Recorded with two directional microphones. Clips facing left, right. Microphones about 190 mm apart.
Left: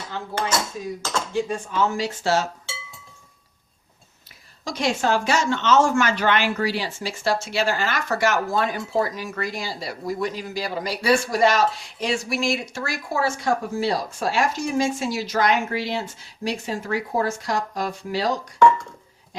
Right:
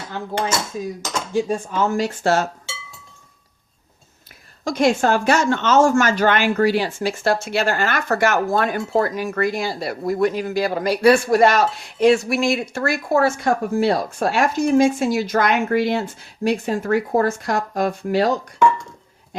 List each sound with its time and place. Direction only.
1.5 s speech: 45° right (ahead or behind)
4.6 s speech: 55° right (ahead or behind)